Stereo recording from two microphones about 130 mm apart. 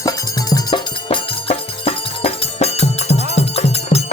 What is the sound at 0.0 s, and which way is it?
Music, 25° left (ahead or behind).